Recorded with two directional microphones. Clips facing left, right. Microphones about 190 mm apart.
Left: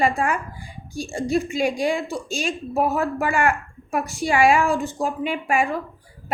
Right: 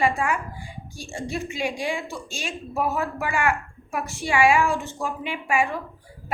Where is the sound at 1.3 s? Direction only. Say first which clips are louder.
Left 7 dB; 40° left (ahead or behind).